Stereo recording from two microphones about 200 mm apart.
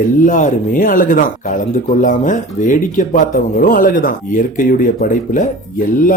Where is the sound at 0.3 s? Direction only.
40° left (ahead or behind).